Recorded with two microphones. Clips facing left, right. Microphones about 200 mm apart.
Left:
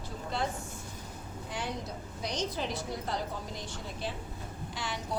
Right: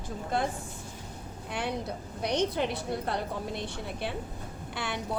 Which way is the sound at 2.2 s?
60° right (ahead or behind).